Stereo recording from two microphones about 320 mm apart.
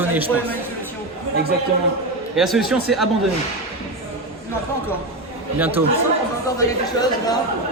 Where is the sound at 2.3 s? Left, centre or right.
Centre.